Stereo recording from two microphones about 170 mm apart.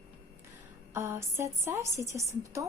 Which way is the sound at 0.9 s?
15° right (ahead or behind).